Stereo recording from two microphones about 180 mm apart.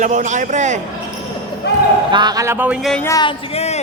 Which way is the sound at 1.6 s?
70° left (ahead or behind).